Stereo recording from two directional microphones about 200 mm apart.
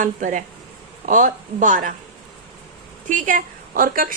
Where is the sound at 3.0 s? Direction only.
40° right (ahead or behind).